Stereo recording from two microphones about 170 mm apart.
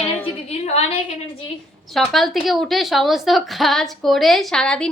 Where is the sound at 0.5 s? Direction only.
40° left (ahead or behind).